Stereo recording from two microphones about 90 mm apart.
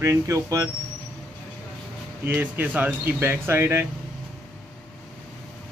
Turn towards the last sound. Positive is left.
turn(degrees=-25)  # may be behind; listen again after turning